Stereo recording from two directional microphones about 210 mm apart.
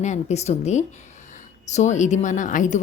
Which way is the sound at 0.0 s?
35° left (ahead or behind).